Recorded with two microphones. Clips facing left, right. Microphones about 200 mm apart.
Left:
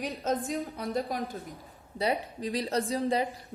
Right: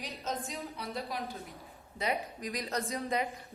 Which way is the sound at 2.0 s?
30° left (ahead or behind).